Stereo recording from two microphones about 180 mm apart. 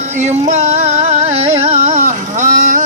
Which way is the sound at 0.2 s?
40° right (ahead or behind).